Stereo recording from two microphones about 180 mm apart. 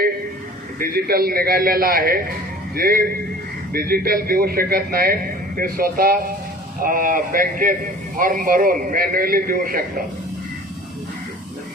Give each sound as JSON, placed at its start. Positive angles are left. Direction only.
{"t": 0.8, "sound": "a man's voice", "side_deg": -60}